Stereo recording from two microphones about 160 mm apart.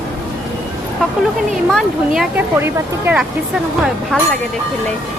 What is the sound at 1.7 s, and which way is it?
Speech, centre (ahead or behind).